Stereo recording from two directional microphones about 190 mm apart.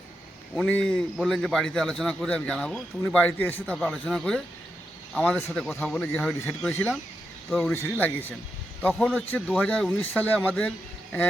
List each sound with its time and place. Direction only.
0.5 s a man's voice: 5° left (ahead or behind)